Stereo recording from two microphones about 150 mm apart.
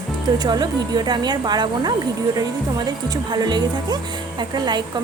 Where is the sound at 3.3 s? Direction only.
30° right (ahead or behind).